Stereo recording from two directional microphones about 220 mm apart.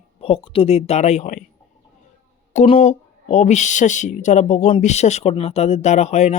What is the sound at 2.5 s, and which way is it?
Speech, 30° left (ahead or behind).